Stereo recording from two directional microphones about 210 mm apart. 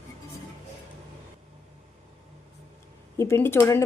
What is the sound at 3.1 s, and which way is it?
Speech, 15° left (ahead or behind).